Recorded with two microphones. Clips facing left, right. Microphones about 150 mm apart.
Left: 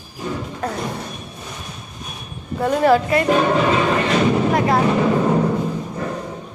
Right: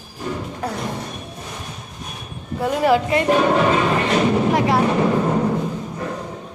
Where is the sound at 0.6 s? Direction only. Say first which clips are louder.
Left 1 dB; 10° right (ahead or behind).